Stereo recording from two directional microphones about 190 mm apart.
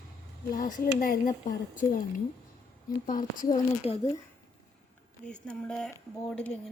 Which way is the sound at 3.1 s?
45° left (ahead or behind).